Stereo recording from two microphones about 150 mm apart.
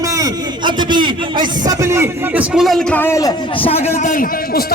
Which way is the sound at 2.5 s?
Centre (ahead or behind).